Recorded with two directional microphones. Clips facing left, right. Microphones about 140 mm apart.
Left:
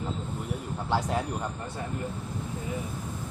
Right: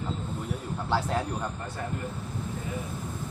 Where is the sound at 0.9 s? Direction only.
15° left (ahead or behind).